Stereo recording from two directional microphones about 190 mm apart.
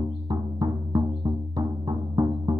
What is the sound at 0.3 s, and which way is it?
Music, 20° right (ahead or behind).